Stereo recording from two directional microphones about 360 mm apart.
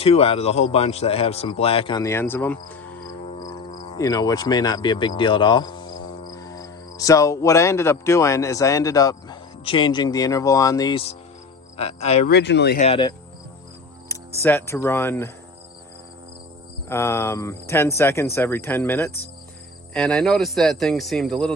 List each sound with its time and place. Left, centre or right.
0.0 s speech: centre
12.4 s speech: left
14.1 s cricket: centre
16.9 s speech: centre